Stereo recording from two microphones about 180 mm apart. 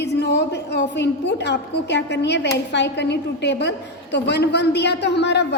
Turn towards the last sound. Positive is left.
turn(degrees=70)  # may be behind; listen again after turning